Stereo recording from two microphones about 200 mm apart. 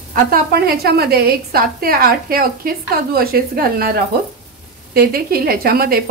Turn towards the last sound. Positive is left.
turn(degrees=-50)  # may be behind; listen again after turning